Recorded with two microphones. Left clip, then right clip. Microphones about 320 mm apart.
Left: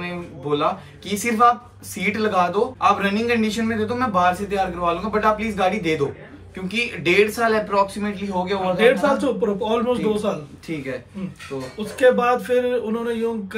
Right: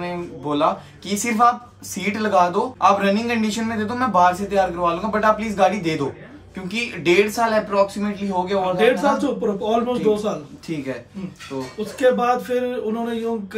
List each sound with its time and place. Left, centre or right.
0.0 s speech: centre
8.7 s speech: centre
10.7 s speech: centre
12.0 s speech: centre